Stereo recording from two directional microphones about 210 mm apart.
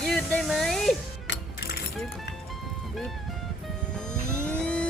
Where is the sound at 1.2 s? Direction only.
55° left (ahead or behind).